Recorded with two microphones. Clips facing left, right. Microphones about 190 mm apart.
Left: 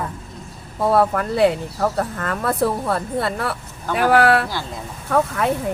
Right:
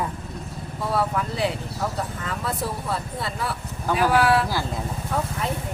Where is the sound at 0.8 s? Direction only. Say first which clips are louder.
Left 7 dB; 55° left (ahead or behind).